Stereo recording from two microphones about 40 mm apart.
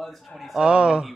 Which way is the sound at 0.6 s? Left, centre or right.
Right.